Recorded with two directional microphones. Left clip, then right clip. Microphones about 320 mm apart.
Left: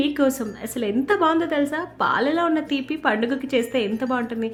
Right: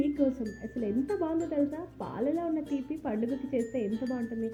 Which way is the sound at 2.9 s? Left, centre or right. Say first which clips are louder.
Left 12 dB; left.